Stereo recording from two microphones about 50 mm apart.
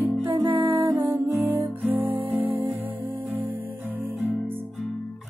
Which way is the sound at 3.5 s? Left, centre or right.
Right.